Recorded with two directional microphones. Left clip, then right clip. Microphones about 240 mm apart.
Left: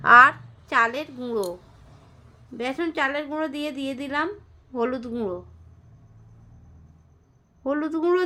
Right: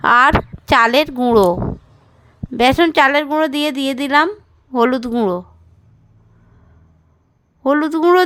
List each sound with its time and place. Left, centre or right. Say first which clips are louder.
0.0 s speech: right 3 dB; right
2.6 s a woman's voice: right 14 dB; right
7.6 s a woman's voice: right 10 dB; right